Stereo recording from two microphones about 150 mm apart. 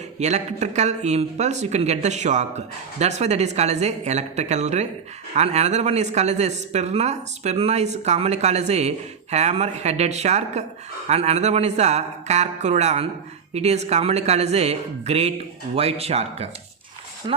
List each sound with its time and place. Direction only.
0.2 s speech: 50° right (ahead or behind)
17.2 s speech: 30° right (ahead or behind)